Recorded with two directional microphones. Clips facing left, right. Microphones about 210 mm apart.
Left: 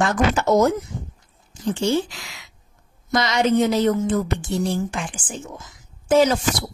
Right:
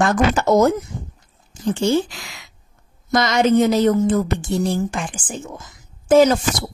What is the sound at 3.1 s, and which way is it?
A woman's voice, 45° right (ahead or behind).